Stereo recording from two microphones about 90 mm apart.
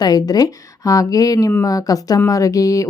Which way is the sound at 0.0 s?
45° left (ahead or behind).